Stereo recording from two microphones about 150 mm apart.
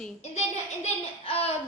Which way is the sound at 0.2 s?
50° left (ahead or behind).